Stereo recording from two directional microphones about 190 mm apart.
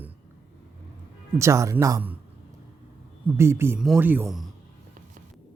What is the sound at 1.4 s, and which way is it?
Speech, 15° right (ahead or behind).